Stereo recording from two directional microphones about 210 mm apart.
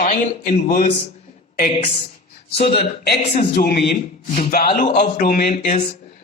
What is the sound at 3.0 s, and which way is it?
Speech, 45° left (ahead or behind).